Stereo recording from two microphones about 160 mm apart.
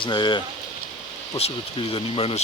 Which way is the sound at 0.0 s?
30° left (ahead or behind).